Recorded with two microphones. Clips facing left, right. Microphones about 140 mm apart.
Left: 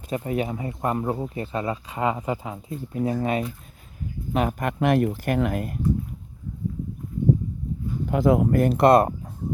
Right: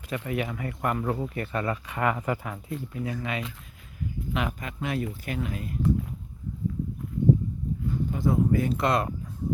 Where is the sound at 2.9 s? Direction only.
35° left (ahead or behind).